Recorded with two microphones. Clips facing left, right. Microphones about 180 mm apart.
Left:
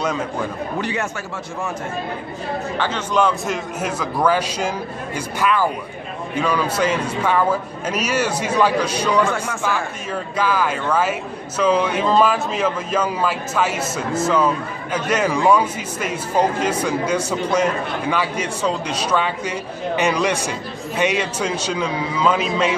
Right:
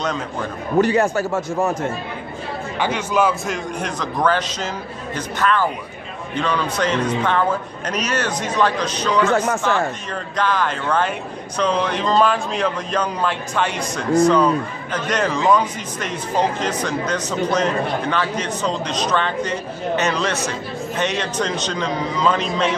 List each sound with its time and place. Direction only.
0.7 s a man's voice: 40° right (ahead or behind)
2.8 s a man's voice: 10° right (ahead or behind)
3.8 s speech: 10° left (ahead or behind)